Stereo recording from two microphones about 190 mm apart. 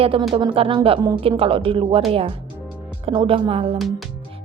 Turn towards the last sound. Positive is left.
turn(degrees=-30)  # may be behind; listen again after turning